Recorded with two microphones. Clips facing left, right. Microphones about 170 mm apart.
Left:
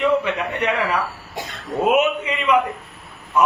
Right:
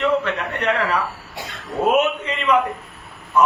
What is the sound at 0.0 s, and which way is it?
Speech, 10° left (ahead or behind).